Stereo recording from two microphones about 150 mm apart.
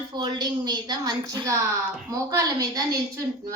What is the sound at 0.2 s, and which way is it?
A woman's voice, 30° right (ahead or behind).